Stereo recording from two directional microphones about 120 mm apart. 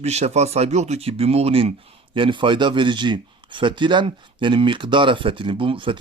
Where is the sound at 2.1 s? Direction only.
45° right (ahead or behind).